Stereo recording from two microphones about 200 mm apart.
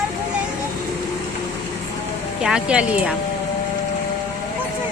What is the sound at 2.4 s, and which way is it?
Speech, 5° right (ahead or behind).